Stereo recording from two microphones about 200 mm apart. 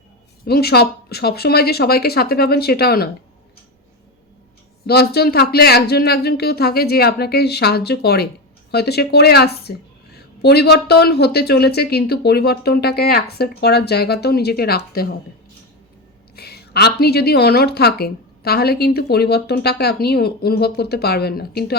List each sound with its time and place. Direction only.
0.4 s a woman's voice: 50° left (ahead or behind)
4.9 s a woman's voice: 50° left (ahead or behind)
16.3 s a woman's voice: 55° left (ahead or behind)